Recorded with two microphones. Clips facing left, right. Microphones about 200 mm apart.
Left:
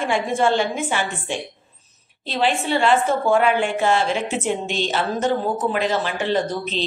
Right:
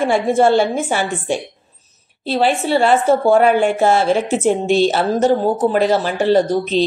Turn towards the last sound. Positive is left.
turn(degrees=-40)  # may be behind; listen again after turning